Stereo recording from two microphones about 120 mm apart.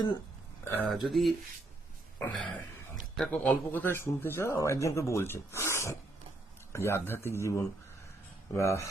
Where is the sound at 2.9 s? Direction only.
Centre (ahead or behind).